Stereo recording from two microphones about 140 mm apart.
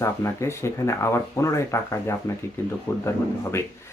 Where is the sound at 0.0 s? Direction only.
20° left (ahead or behind).